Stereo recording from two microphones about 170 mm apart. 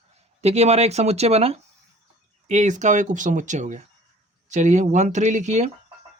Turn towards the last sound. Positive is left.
turn(degrees=-45)  # may be behind; listen again after turning